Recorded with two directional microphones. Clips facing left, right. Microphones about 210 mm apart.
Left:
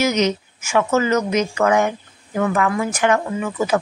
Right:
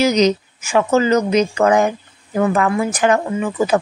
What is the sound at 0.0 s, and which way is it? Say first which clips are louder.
Speech: right 4 dB; 35° right (ahead or behind).